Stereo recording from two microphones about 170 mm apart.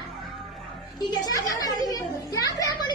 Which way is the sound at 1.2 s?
20° left (ahead or behind).